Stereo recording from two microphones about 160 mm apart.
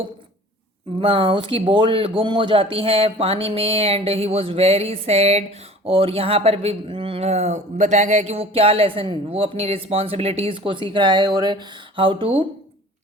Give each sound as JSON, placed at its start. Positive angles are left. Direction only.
{"t": 0.9, "sound": "speech", "side_deg": -30}